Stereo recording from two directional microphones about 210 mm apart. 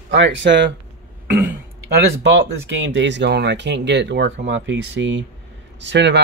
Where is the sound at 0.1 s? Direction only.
60° right (ahead or behind).